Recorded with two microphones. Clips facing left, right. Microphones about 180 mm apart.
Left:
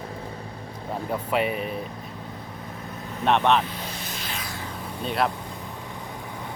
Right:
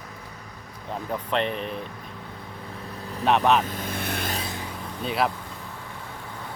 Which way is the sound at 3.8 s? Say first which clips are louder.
Right 5 dB; 55° right (ahead or behind).